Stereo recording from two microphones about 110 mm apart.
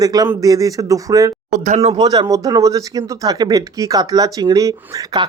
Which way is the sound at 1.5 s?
80° right.